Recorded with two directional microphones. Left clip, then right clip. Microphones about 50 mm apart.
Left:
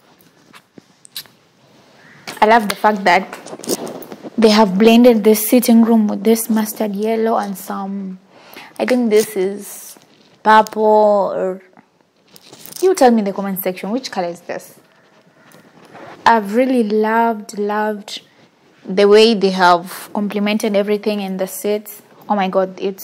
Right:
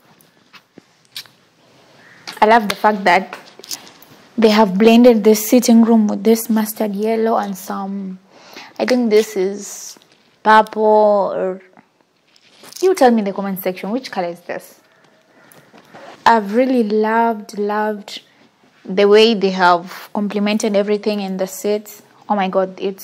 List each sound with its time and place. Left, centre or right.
1.1 s a sound: left
2.3 s a woman's voice: centre
4.4 s speech: left
4.8 s a woman's voice: centre; by 6.5 s right
6.5 s a woman's voice: centre
10.7 s speech: centre
12.8 s speech: left
13.4 s a woman's voice: centre
13.8 s a woman's voice: left
16.3 s a woman's voice: centre
18.9 s a woman's voice: left
20.2 s a woman's voice: centre
21.4 s a woman's voice: centre
22.2 s speech: centre